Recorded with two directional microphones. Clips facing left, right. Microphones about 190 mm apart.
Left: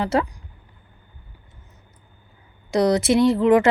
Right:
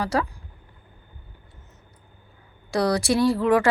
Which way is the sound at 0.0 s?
25° left (ahead or behind).